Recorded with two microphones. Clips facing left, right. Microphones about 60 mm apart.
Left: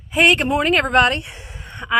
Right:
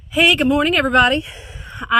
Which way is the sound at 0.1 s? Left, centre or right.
Left.